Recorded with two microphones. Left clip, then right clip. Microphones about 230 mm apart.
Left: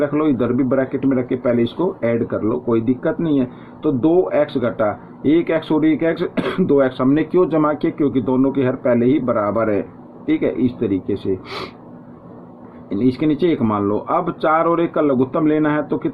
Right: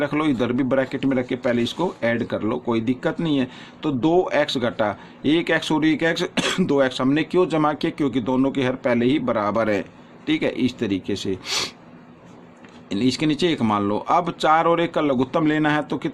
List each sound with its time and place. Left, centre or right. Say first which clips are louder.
0.0 s speech: left 4 dB; right
12.9 s speech: left 4 dB; right